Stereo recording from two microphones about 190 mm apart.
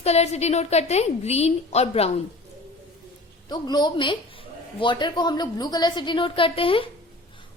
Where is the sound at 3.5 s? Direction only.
20° left (ahead or behind).